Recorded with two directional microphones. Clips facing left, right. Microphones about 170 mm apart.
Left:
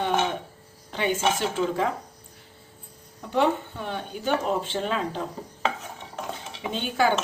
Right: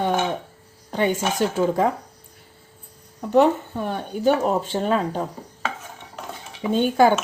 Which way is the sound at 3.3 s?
45° right (ahead or behind).